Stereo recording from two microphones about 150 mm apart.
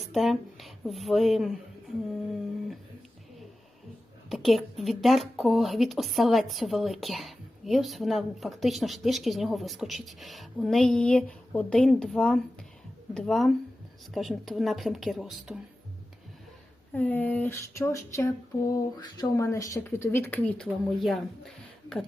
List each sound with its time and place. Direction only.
0.0 s a woman's voice: centre (ahead or behind)
4.3 s speech: centre (ahead or behind)
16.9 s speech: 10° left (ahead or behind)